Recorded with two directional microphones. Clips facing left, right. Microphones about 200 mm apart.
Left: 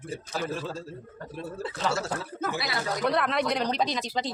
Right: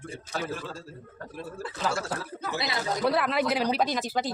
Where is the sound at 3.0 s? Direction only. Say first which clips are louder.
Right 1 dB; 5° right (ahead or behind).